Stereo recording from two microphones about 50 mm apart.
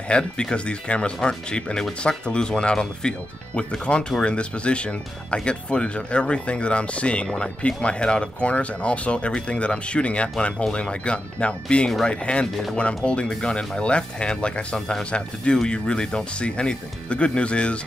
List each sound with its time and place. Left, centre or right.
0.1 s speech: centre